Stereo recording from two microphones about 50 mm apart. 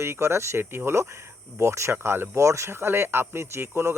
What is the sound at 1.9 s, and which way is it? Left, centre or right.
Speech, right.